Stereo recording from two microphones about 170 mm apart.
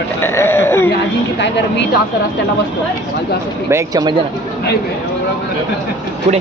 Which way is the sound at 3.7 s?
20° right (ahead or behind).